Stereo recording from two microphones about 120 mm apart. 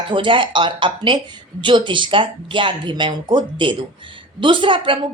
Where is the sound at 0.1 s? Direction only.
45° right (ahead or behind).